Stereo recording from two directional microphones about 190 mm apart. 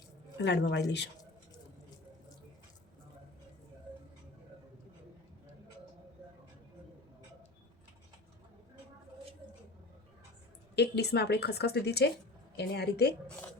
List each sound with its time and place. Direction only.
0.3 s a woman's voice: 65° left (ahead or behind)
10.8 s a woman's voice: 60° left (ahead or behind)